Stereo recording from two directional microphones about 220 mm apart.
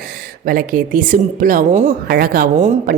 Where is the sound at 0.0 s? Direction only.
40° right (ahead or behind).